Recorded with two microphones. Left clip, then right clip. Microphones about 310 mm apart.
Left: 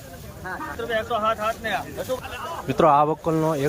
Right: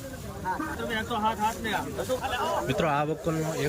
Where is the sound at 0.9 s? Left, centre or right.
Centre.